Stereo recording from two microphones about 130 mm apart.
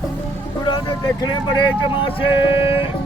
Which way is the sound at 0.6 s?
35° left (ahead or behind).